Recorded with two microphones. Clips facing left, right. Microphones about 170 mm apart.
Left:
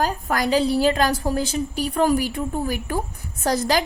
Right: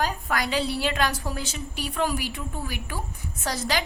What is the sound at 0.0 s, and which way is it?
A woman's voice, 40° left (ahead or behind).